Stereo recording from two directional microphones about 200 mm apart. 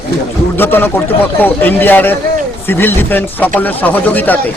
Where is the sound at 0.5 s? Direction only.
10° left (ahead or behind).